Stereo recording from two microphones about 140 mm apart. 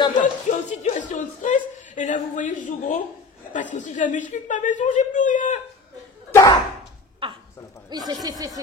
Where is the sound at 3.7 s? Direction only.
60° left (ahead or behind).